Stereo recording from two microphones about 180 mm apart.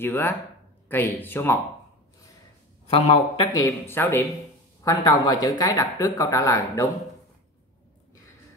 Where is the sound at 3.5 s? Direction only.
15° left (ahead or behind).